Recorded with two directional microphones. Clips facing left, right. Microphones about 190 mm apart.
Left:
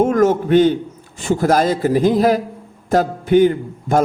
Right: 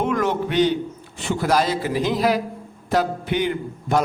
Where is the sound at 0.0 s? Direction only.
45° left (ahead or behind).